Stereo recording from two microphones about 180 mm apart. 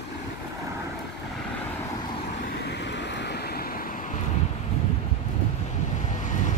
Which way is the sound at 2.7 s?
75° left (ahead or behind).